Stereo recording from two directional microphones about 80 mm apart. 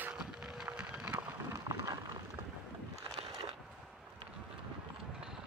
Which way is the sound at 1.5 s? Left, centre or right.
Right.